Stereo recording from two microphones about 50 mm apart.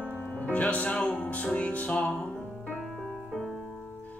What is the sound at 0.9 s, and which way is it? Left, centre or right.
Music, centre.